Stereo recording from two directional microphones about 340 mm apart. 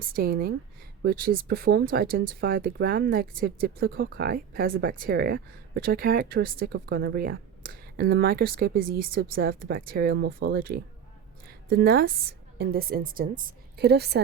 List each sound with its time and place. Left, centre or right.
0.0 s a woman's voice: right